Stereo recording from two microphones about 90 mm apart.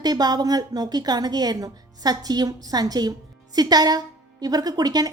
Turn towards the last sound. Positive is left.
turn(degrees=-45)  # may be behind; listen again after turning